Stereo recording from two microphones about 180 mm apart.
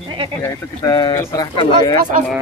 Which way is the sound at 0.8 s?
20° left (ahead or behind).